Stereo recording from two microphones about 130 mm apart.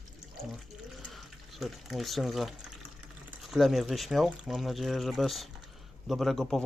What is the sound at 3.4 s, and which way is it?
Speech, centre (ahead or behind).